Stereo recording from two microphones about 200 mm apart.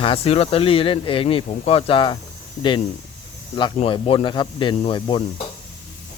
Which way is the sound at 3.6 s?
25° left (ahead or behind).